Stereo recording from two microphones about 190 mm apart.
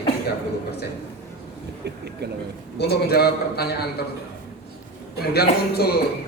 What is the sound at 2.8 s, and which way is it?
Speech, 55° left (ahead or behind).